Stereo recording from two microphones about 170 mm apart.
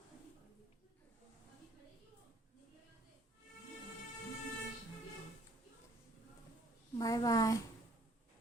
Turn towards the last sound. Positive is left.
turn(degrees=20)  # may be behind; listen again after turning